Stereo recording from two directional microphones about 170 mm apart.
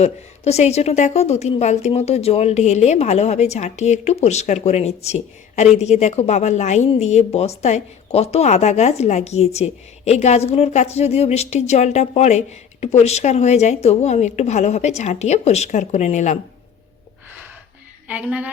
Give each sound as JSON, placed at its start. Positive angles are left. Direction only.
{"t": 0.0, "sound": "a woman's voice", "side_deg": 40}
{"t": 18.1, "sound": "a woman's voice", "side_deg": -10}